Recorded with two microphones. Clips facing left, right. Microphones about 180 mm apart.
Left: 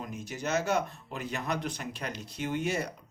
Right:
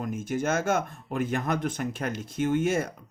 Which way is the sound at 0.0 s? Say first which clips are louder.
Right 8 dB; 50° right (ahead or behind).